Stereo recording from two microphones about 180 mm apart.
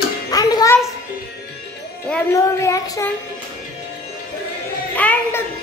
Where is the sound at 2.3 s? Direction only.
15° left (ahead or behind).